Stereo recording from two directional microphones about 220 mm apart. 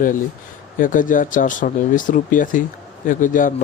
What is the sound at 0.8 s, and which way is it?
Speech, 35° left (ahead or behind).